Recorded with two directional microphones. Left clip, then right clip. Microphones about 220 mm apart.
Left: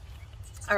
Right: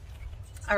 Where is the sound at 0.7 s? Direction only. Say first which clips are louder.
Even; 15° right (ahead or behind).